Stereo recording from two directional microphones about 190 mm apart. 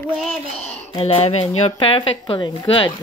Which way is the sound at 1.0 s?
35° left (ahead or behind).